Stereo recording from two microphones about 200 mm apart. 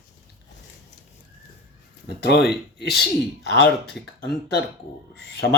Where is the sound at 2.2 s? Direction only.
55° left (ahead or behind).